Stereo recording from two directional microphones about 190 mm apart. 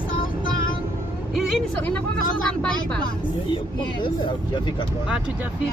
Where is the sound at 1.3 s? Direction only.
Centre (ahead or behind).